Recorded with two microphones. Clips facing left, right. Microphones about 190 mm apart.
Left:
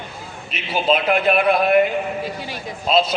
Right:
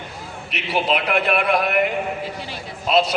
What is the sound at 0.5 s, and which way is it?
A man's voice, 70° right (ahead or behind).